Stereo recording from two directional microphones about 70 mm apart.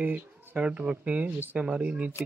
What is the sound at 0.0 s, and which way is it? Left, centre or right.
Speech, right.